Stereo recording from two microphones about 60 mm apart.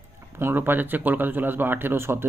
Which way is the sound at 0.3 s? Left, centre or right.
Right.